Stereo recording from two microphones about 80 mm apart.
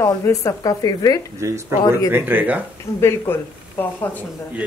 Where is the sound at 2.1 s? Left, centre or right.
Right.